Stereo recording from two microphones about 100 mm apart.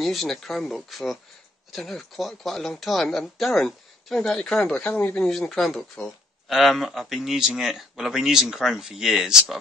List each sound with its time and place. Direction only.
0.0 s speech: centre (ahead or behind)